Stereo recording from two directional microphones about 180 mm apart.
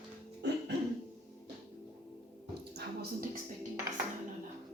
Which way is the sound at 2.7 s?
60° right (ahead or behind).